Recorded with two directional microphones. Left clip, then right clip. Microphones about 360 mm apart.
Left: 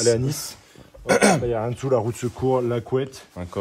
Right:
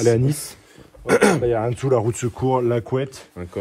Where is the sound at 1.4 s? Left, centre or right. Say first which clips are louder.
Right 4 dB; right.